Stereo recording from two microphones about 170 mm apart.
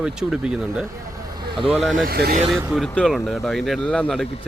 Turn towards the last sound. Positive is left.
turn(degrees=5)  # may be behind; listen again after turning